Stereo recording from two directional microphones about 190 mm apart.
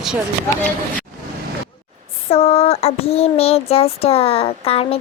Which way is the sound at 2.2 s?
30° left (ahead or behind).